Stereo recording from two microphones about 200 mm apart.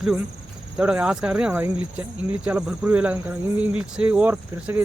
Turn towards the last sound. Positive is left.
turn(degrees=-10)  # may be behind; listen again after turning